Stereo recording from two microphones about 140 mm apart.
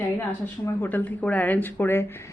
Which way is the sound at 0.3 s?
15° left (ahead or behind).